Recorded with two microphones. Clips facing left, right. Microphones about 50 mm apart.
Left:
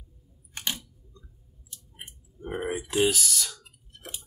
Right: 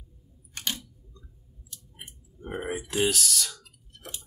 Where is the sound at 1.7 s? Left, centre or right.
Centre.